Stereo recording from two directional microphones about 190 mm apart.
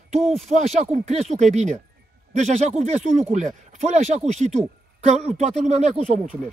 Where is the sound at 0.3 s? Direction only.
35° right (ahead or behind).